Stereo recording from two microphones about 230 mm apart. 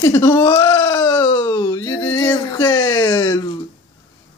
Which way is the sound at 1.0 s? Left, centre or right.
Centre.